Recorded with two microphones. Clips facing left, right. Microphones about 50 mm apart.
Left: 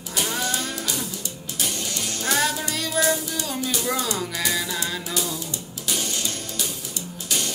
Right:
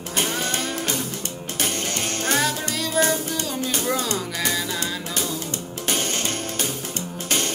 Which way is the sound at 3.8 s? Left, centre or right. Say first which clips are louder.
Right 2 dB; centre.